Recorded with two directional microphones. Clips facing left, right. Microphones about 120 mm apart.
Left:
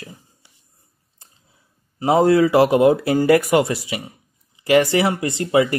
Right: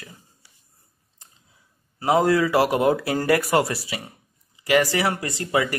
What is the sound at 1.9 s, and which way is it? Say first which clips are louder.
Speech: left 4 dB; 25° left (ahead or behind).